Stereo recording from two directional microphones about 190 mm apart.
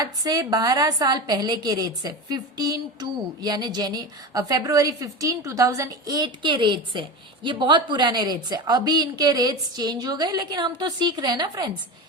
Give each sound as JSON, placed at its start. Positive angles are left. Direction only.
{"t": 0.0, "sound": "a woman's voice", "side_deg": -20}